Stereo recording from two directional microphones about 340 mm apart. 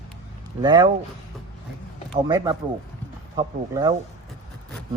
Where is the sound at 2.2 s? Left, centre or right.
Centre.